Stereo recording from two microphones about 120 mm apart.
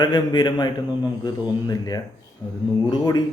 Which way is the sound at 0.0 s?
35° left (ahead or behind).